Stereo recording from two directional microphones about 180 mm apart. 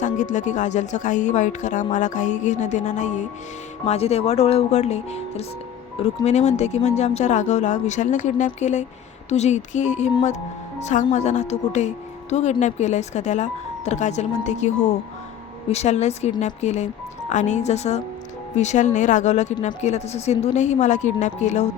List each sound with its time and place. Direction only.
0.0 s speech: 45° left (ahead or behind)